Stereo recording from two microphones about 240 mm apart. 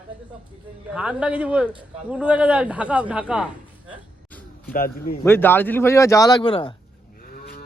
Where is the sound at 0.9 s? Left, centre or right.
Centre.